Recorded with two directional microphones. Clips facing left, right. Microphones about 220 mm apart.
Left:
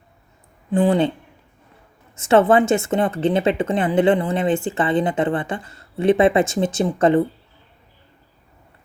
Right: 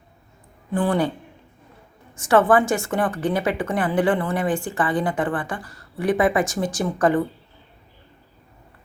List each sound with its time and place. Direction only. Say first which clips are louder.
0.7 s speech: left 4 dB; 20° left (ahead or behind)
2.1 s speech: left 2 dB; 25° left (ahead or behind)